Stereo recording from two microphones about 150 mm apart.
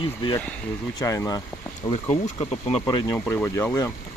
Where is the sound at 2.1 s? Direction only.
45° left (ahead or behind).